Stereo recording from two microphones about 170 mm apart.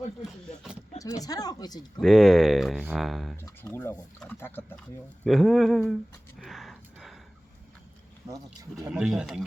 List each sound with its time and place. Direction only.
0.3 s a sound: centre (ahead or behind)
0.9 s speech: 20° left (ahead or behind)
2.0 s speech: centre (ahead or behind)
3.4 s speech: 15° left (ahead or behind)
5.2 s speech: centre (ahead or behind)
6.4 s a sound: centre (ahead or behind)
8.9 s speech: 5° right (ahead or behind)